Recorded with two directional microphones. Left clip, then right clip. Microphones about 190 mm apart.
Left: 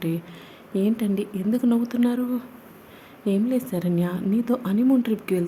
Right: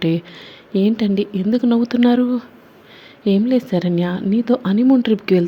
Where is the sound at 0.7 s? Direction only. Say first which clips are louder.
Right 6 dB; 20° right (ahead or behind).